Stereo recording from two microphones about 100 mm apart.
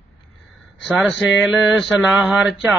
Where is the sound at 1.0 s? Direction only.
Centre (ahead or behind).